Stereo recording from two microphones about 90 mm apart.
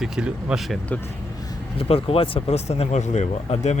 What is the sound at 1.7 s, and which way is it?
Speech, 90° left.